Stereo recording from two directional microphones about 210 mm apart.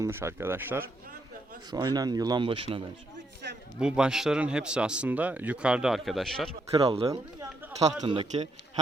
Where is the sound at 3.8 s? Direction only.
5° right (ahead or behind).